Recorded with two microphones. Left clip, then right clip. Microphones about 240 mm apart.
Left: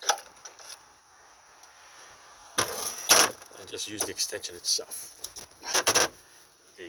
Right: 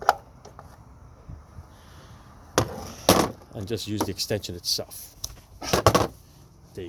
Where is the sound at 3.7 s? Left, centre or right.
Centre.